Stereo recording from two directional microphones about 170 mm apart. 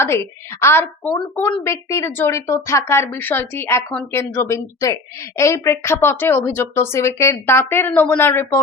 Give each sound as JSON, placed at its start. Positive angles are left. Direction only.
{"t": 0.0, "sound": "a woman's voice", "side_deg": 15}